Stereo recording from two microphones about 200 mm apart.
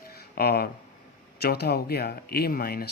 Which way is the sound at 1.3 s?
55° left (ahead or behind).